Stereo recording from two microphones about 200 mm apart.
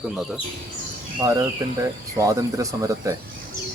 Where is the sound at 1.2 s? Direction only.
15° right (ahead or behind).